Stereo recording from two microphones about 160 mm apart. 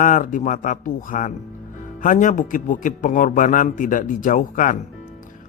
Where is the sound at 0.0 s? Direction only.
55° left (ahead or behind).